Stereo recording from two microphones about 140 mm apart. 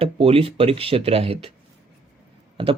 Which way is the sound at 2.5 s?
40° right (ahead or behind).